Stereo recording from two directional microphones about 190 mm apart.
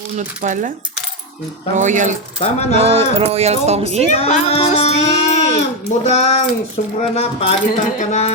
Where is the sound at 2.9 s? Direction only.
30° right (ahead or behind).